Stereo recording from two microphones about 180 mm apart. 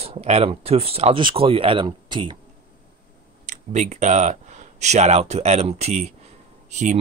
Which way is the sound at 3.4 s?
45° right (ahead or behind).